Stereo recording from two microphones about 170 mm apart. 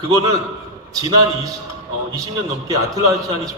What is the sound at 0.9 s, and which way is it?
Speech, 20° right (ahead or behind).